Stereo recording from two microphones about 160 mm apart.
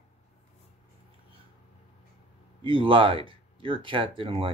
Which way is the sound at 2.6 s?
35° right (ahead or behind).